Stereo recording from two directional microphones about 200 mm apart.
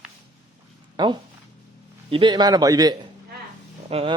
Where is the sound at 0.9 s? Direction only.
20° right (ahead or behind).